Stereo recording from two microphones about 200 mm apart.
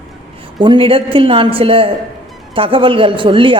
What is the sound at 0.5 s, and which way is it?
A woman's voice, 25° right (ahead or behind).